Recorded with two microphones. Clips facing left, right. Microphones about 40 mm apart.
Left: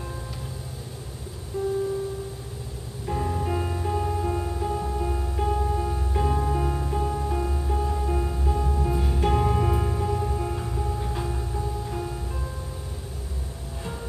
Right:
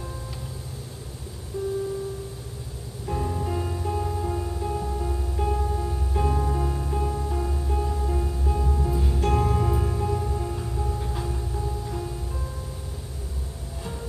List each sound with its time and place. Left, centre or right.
3.1 s music: centre
5.5 s music: centre